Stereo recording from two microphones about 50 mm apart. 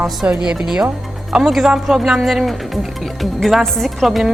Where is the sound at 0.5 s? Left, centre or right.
Centre.